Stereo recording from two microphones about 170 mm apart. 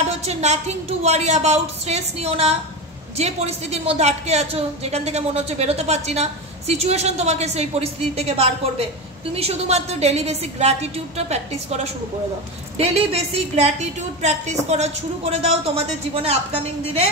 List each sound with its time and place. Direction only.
0.2 s a woman's voice: 40° right (ahead or behind)